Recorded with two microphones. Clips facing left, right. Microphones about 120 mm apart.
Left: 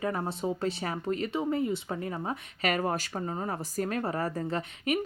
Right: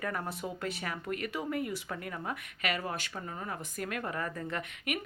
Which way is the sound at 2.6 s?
45° left (ahead or behind).